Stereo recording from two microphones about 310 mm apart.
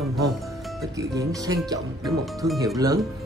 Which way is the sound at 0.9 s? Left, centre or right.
Centre.